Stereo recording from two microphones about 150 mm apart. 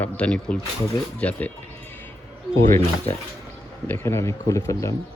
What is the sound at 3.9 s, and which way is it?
Speech, 15° left (ahead or behind).